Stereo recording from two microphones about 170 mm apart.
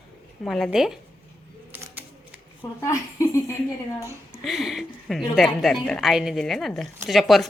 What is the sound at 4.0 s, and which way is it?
Speech, 15° right (ahead or behind).